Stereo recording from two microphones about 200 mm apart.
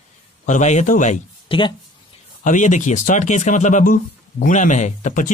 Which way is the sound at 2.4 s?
40° left (ahead or behind).